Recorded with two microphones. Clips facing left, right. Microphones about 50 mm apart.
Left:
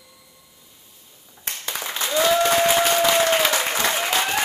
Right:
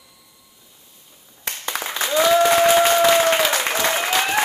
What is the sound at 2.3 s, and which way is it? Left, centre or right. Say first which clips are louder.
Applause: right 4 dB; right.